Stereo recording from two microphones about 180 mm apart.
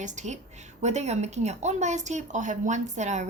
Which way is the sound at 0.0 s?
45° right (ahead or behind).